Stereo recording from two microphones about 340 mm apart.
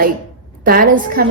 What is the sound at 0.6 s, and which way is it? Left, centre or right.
Speech, right.